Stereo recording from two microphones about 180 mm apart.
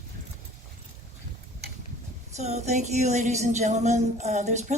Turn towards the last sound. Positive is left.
turn(degrees=-40)  # may be behind; listen again after turning